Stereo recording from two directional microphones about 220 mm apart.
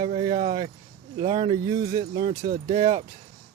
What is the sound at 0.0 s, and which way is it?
Speech, 25° right (ahead or behind).